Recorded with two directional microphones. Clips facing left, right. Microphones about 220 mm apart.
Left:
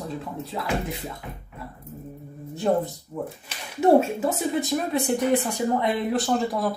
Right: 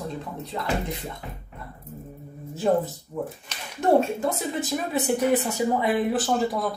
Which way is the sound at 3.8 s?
5° left (ahead or behind).